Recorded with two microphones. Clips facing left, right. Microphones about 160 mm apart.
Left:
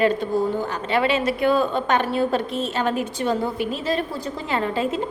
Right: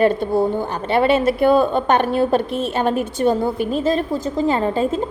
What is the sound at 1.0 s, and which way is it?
A woman's voice, 50° right (ahead or behind).